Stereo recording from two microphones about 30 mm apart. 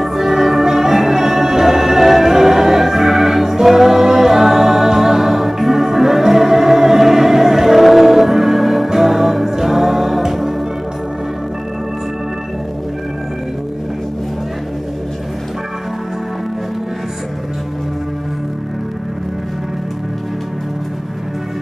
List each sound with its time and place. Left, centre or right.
0.0 s music: centre